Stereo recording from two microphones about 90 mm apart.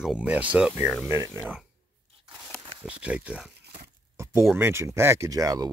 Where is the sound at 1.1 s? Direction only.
30° right (ahead or behind).